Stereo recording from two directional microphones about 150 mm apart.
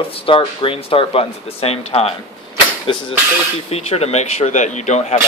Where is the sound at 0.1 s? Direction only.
40° left (ahead or behind).